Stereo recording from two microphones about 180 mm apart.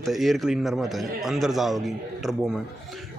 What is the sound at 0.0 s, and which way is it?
Speech, centre (ahead or behind).